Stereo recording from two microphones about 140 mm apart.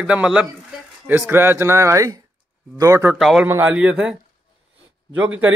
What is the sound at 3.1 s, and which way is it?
Speech, centre (ahead or behind).